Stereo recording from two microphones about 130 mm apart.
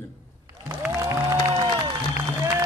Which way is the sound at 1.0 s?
25° right (ahead or behind).